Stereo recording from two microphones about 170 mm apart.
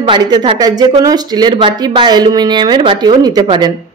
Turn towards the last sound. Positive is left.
turn(degrees=-25)  # may be behind; listen again after turning